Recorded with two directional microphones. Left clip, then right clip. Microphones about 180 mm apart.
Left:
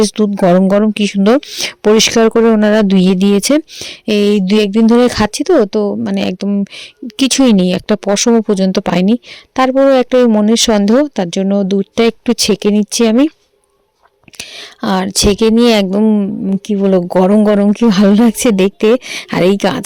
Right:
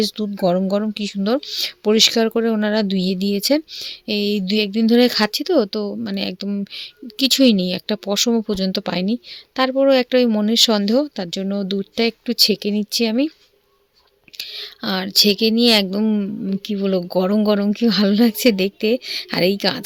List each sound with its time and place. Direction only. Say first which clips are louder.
0.0 s a woman's voice: left 8 dB; 50° left (ahead or behind)
14.3 s a woman's voice: left 3 dB; 50° left (ahead or behind)